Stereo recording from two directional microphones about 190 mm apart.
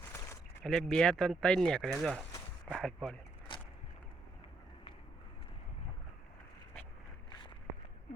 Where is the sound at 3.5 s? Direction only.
25° left (ahead or behind).